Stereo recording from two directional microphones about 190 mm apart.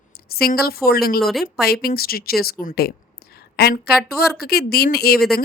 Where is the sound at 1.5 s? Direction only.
55° left (ahead or behind).